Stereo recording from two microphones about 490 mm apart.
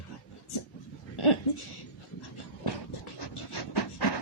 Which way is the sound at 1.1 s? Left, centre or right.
Left.